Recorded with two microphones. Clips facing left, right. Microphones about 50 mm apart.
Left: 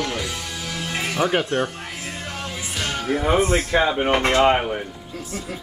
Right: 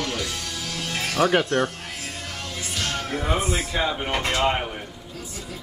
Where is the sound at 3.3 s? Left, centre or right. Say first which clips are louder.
Left 6 dB; centre.